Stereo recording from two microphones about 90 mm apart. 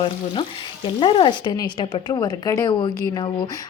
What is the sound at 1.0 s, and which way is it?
A woman's voice, 60° left (ahead or behind).